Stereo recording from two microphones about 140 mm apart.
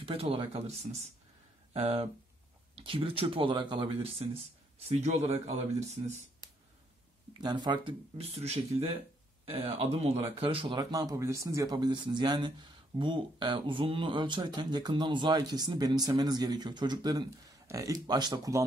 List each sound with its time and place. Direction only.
0.0 s speech: 40° right (ahead or behind)
7.3 s speech: 30° right (ahead or behind)